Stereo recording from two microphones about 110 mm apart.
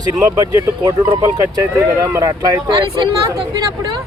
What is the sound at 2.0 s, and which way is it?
Speech, 30° right (ahead or behind).